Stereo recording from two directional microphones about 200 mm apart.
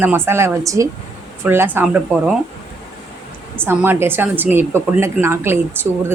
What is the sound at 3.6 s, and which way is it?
A woman's voice, 10° right (ahead or behind).